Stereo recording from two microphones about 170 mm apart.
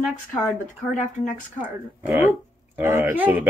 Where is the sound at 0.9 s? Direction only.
45° left (ahead or behind).